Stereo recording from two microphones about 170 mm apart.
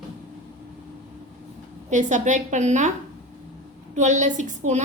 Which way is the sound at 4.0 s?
45° right (ahead or behind).